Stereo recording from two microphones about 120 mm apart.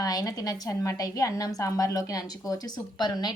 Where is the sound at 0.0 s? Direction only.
30° left (ahead or behind).